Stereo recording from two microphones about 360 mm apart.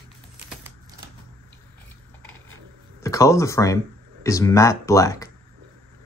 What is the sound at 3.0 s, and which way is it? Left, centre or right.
Speech, centre.